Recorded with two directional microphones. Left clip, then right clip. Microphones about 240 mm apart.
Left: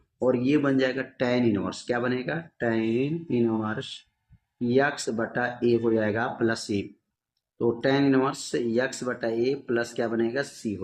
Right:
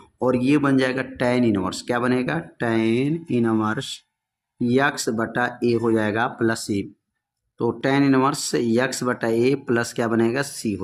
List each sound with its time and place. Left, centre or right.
0.2 s speech: right